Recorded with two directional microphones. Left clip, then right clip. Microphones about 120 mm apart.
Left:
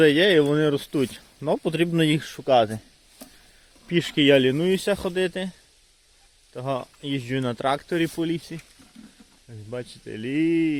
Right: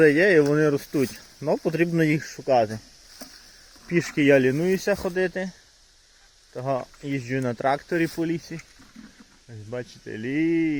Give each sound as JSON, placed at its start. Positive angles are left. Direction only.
{"t": 0.0, "sound": "speech", "side_deg": 35}
{"t": 0.4, "sound": "speech", "side_deg": 20}
{"t": 0.8, "sound": "speech", "side_deg": 35}
{"t": 1.5, "sound": "speech", "side_deg": 20}
{"t": 3.8, "sound": "speech", "side_deg": 30}
{"t": 6.5, "sound": "speech", "side_deg": 25}
{"t": 8.5, "sound": "speech", "side_deg": 15}